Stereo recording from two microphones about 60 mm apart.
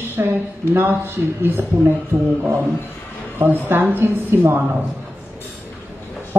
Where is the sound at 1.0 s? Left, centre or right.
Right.